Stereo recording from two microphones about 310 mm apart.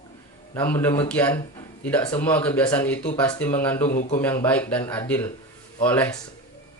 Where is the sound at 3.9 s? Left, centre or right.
Left.